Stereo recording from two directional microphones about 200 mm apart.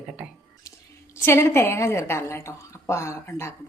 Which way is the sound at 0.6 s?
15° left (ahead or behind).